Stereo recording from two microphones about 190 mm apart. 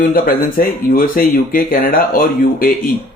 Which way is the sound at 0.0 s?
50° left (ahead or behind).